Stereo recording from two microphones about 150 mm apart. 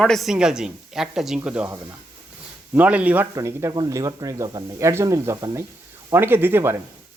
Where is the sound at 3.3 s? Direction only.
20° right (ahead or behind).